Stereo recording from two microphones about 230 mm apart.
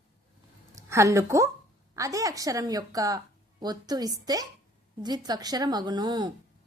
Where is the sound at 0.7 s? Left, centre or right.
Centre.